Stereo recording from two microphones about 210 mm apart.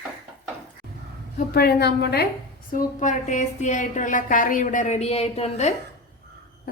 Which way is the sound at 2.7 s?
35° left (ahead or behind).